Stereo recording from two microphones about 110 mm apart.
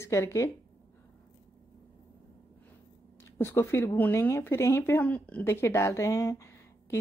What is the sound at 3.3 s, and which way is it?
Speech, 20° left (ahead or behind).